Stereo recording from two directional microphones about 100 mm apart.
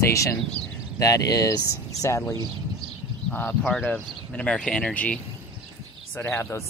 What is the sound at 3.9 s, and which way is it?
Speech, 10° left (ahead or behind).